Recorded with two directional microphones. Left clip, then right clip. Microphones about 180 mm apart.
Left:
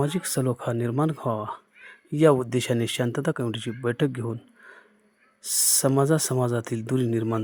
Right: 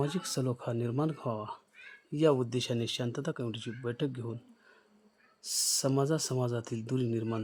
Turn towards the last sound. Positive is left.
turn(degrees=25)  # may be behind; listen again after turning